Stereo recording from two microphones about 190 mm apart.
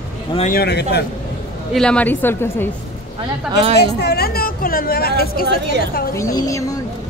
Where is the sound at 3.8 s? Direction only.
55° left (ahead or behind).